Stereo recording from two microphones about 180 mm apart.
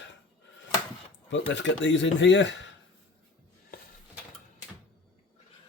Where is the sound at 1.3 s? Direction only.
90° left.